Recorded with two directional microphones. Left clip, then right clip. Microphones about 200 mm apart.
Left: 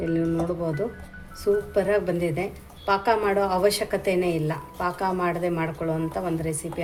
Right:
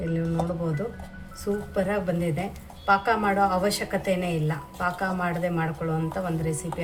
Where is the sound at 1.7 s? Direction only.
25° left (ahead or behind).